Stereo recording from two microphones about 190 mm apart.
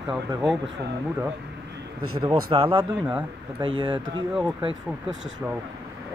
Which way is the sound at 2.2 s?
30° right (ahead or behind).